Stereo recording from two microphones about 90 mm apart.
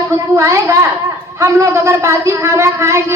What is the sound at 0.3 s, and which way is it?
A woman's voice, 35° right (ahead or behind).